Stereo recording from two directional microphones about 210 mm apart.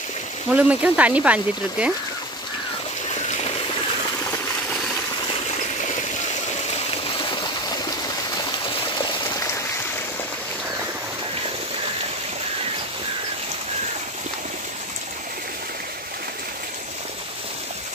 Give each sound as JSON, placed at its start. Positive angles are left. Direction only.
{"t": 0.5, "sound": "speech", "side_deg": -5}
{"t": 3.2, "sound": "water", "side_deg": 30}
{"t": 5.3, "sound": "stream", "side_deg": 30}
{"t": 8.4, "sound": "a sound", "side_deg": 20}